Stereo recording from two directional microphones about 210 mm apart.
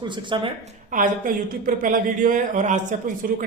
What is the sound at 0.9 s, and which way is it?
A woman's voice, 40° right (ahead or behind).